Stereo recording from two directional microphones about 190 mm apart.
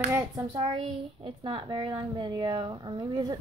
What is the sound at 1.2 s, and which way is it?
A woman's voice, 25° right (ahead or behind).